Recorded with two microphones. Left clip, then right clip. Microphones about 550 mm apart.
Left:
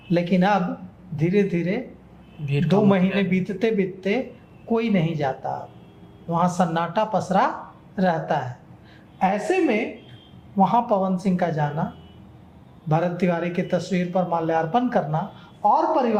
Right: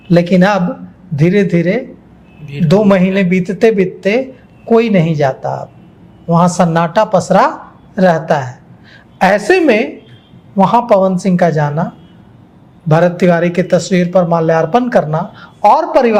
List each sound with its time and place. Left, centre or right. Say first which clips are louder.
0.1 s a man's voice: right 10 dB; right
12.9 s a man's voice: right 12 dB; right
15.6 s a woman's voice: right 10 dB; right